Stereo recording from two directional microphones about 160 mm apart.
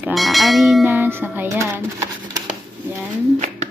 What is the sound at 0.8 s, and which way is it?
Speech, 15° right (ahead or behind).